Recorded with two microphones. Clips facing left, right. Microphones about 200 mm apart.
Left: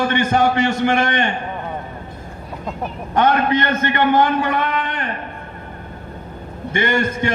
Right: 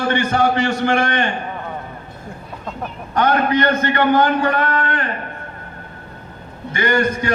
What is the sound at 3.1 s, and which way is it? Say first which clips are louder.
A man's voice: even; 25° left (ahead or behind).